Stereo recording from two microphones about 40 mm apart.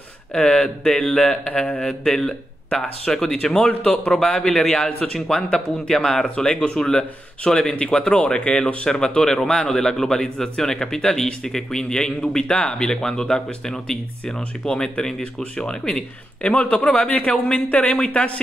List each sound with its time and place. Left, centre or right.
0.3 s a man's voice: centre
1.4 s speech: left
1.8 s a man's voice: centre
3.5 s a man's voice: left
6.3 s a man's voice: left
12.8 s a man's voice: centre
16.4 s speech: left